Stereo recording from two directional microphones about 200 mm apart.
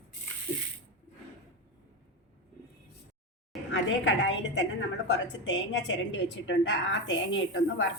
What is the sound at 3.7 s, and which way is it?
A woman's voice, 65° left (ahead or behind).